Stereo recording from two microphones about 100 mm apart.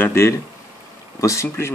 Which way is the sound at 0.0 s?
25° left (ahead or behind).